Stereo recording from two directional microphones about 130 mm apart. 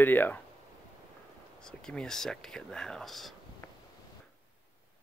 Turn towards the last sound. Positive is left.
turn(degrees=20)  # may be behind; listen again after turning